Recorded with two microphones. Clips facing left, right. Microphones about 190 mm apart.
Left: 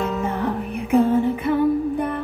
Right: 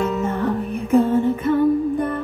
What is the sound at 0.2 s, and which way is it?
Music, 15° left (ahead or behind).